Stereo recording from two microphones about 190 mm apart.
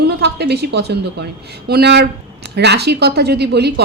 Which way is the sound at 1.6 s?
60° right (ahead or behind).